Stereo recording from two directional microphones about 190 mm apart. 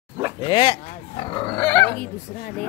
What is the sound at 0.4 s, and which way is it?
Dog, 25° left (ahead or behind).